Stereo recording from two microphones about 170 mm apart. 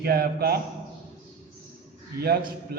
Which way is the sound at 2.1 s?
70° right (ahead or behind).